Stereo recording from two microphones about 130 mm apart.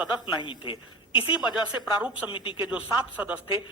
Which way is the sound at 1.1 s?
10° right (ahead or behind).